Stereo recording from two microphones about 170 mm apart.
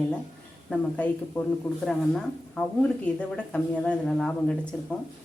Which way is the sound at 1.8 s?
5° left (ahead or behind).